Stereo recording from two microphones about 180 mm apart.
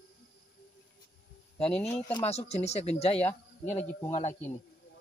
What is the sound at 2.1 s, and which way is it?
Speech, 35° left (ahead or behind).